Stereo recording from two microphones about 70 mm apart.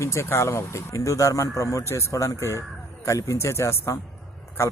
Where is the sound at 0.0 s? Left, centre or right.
Left.